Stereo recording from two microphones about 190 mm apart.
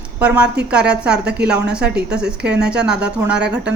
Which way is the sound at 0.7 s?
5° right (ahead or behind).